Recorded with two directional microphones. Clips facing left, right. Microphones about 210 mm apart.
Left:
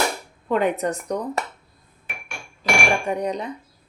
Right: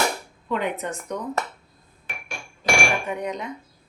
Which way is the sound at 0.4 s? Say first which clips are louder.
Left 6 dB; 45° left (ahead or behind).